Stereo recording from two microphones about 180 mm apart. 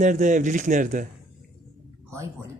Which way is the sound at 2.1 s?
15° right (ahead or behind).